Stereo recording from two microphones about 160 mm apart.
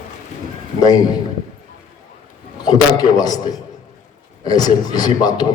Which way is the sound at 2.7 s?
25° left (ahead or behind).